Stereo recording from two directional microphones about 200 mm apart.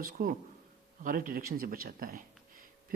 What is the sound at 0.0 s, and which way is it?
Speech, 45° right (ahead or behind).